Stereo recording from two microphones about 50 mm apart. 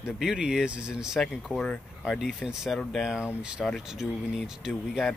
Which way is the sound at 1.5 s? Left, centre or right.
Centre.